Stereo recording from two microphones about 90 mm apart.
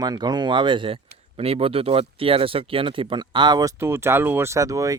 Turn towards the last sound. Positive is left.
turn(degrees=-40)  # may be behind; listen again after turning